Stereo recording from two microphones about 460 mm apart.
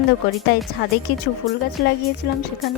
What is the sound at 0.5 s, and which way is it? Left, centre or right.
Speech, left.